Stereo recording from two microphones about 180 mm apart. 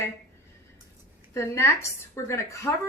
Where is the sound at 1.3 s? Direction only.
15° left (ahead or behind).